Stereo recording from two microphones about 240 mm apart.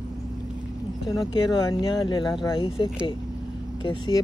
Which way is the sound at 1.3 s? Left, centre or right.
Centre.